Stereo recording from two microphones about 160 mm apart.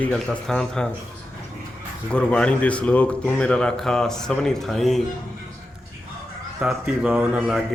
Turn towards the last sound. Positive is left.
turn(degrees=-5)  # may be behind; listen again after turning